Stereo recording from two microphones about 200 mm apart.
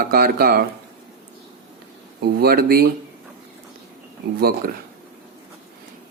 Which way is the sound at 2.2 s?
50° right (ahead or behind).